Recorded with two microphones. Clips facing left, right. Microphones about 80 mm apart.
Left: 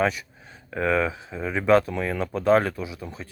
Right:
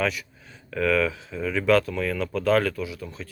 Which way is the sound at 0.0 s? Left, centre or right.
Left.